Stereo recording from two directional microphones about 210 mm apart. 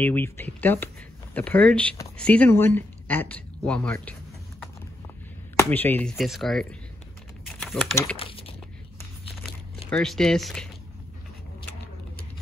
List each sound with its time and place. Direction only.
0.0 s speech: 10° left (ahead or behind)
5.6 s speech: 10° left (ahead or behind)
7.4 s typing: centre (ahead or behind)
8.2 s a sound: 25° left (ahead or behind)
9.8 s speech: 5° left (ahead or behind)